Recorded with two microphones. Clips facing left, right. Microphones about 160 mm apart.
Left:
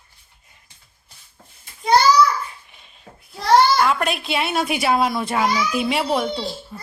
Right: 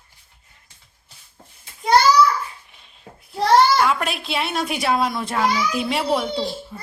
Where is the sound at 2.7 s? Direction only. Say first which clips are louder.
Left 1 dB; centre (ahead or behind).